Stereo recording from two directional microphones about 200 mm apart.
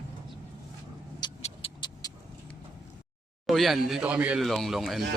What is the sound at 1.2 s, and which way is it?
Vehicle, 25° left (ahead or behind).